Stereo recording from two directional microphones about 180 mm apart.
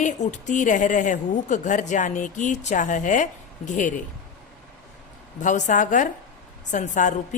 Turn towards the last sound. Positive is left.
turn(degrees=45)  # may be behind; listen again after turning